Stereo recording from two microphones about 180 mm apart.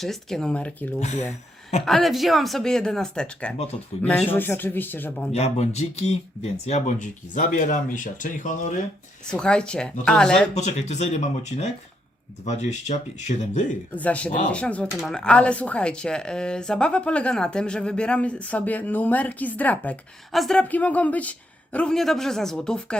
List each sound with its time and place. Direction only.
0.0 s a woman's voice: centre (ahead or behind)
0.9 s speech: 40° left (ahead or behind)
1.8 s a woman's voice: centre (ahead or behind)
3.6 s speech: 35° left (ahead or behind)
4.1 s speech: 10° left (ahead or behind)
5.3 s speech: 40° left (ahead or behind)
9.2 s a woman's voice: 5° left (ahead or behind)
10.5 s speech: 40° left (ahead or behind)
13.9 s a woman's voice: 10° left (ahead or behind)